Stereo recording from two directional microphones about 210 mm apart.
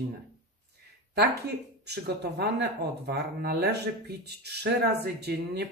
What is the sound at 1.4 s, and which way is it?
Speech, 50° right (ahead or behind).